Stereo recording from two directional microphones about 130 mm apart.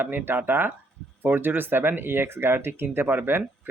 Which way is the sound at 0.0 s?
15° right (ahead or behind).